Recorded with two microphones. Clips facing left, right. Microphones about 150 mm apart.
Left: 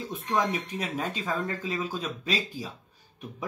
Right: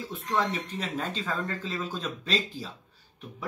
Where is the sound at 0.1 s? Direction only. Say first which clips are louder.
Left 1 dB; 15° left (ahead or behind).